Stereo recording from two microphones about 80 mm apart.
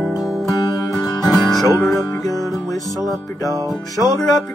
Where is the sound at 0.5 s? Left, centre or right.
Left.